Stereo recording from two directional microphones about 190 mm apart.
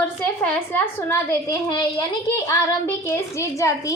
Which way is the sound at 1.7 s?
25° left (ahead or behind).